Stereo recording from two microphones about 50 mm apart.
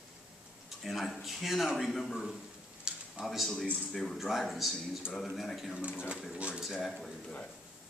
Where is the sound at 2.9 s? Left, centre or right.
Centre.